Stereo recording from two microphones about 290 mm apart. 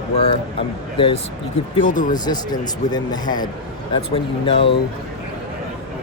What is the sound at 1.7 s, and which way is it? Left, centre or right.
Speech, left.